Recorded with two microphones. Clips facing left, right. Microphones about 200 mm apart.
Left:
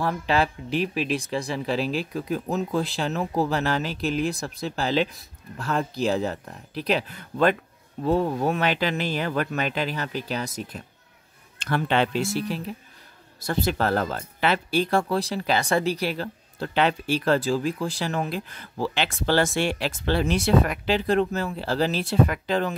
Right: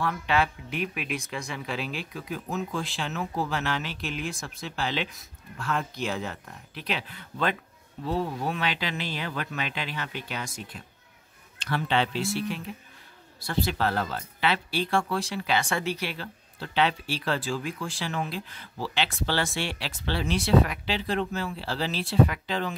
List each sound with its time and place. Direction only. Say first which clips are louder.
0.0 s speech: left 3 dB; 35° left (ahead or behind)
11.6 s speech: left 4 dB; 50° left (ahead or behind)